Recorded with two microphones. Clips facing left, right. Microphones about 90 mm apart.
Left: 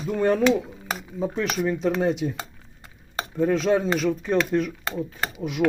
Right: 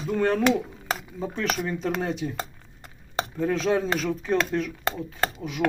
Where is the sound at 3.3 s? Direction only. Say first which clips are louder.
Left 4 dB; centre (ahead or behind).